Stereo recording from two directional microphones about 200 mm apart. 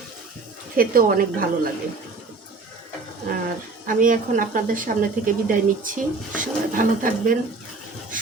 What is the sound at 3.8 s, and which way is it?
A woman's voice, 40° right (ahead or behind).